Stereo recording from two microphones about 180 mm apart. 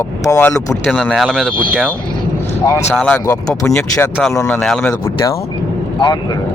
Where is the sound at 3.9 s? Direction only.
10° left (ahead or behind).